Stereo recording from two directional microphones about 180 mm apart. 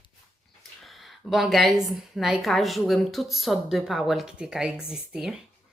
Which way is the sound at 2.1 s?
Centre (ahead or behind).